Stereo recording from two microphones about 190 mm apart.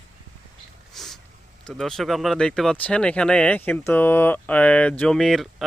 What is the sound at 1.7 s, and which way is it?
Speech, centre (ahead or behind).